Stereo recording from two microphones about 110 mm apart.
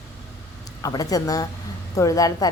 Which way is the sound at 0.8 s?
35° left (ahead or behind).